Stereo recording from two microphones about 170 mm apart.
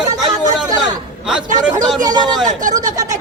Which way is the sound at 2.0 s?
25° right (ahead or behind).